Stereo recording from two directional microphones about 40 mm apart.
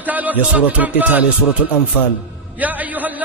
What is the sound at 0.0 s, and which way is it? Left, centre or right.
Speech, right.